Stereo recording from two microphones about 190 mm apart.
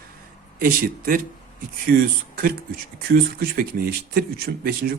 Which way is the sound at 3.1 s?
50° right (ahead or behind).